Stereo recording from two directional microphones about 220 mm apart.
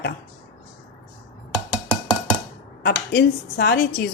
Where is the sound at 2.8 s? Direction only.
45° left (ahead or behind).